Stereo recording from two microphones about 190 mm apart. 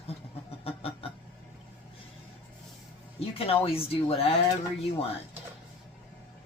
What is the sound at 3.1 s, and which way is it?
Speech, 30° left (ahead or behind).